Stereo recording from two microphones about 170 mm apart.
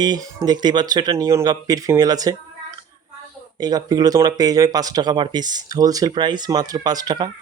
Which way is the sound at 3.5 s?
25° right (ahead or behind).